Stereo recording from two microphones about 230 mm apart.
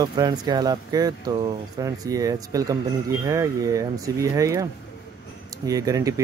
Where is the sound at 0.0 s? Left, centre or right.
Centre.